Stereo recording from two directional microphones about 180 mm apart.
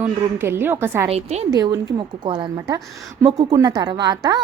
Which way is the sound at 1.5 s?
20° right (ahead or behind).